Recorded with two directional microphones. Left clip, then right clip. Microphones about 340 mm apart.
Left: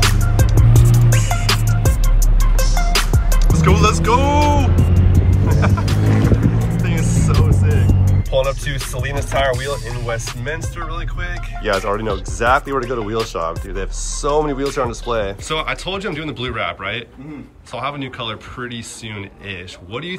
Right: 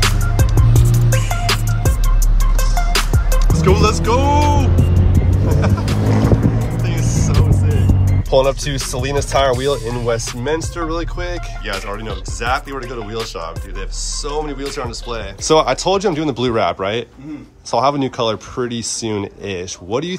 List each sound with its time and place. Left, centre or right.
0.0 s music: centre
3.5 s music: centre
6.1 s vehicle: right
6.6 s music: centre
8.4 s music: centre
9.0 s speech: centre